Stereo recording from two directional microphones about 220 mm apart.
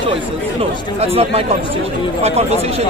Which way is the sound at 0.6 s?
25° right (ahead or behind).